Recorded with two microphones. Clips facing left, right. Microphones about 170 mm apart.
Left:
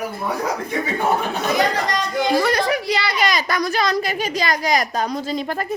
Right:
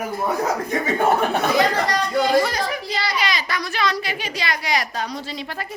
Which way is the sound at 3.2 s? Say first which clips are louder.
Left 5 dB; 45° left (ahead or behind).